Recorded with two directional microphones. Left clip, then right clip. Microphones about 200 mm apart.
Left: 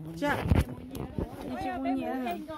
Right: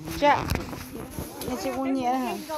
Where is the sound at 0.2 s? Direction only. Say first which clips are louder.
Right 10 dB; 25° left (ahead or behind).